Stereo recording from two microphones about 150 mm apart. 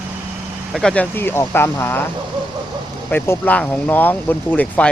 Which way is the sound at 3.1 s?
15° left (ahead or behind).